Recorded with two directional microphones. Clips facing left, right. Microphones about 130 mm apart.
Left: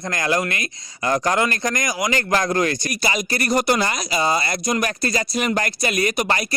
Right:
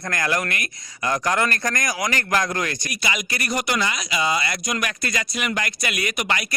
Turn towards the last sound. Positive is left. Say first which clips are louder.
# left 5 dB
turn(degrees=35)  # may be behind; listen again after turning